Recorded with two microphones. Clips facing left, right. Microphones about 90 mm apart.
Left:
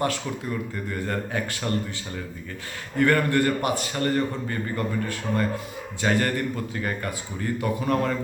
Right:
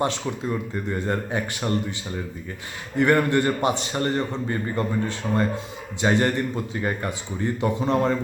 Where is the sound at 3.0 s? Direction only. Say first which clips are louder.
Right 1 dB; 20° right (ahead or behind).